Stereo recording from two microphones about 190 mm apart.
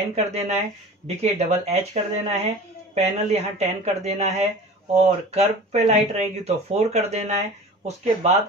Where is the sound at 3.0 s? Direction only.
35° right (ahead or behind).